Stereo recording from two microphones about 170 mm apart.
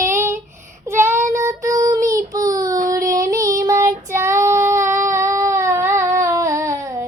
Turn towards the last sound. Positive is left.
turn(degrees=-15)  # may be behind; listen again after turning